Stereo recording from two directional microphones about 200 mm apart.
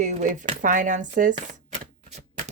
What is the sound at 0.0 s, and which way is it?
Speech, 40° right (ahead or behind).